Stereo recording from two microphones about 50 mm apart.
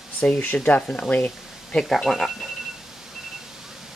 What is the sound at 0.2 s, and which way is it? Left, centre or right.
Speech, left.